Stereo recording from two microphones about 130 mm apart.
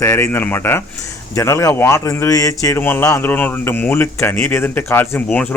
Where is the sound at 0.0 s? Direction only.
20° left (ahead or behind).